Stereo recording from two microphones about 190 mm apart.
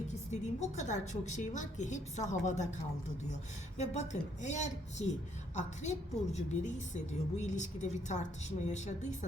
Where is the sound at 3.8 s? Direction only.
35° left (ahead or behind).